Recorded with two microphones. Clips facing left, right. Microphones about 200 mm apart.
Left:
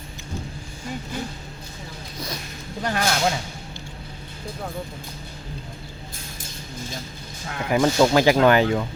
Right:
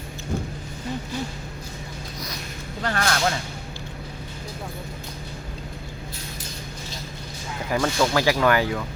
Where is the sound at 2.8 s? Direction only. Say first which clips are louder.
Left 1 dB; 15° left (ahead or behind).